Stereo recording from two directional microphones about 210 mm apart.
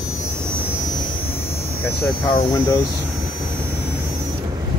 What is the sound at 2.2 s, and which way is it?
Speech, 20° left (ahead or behind).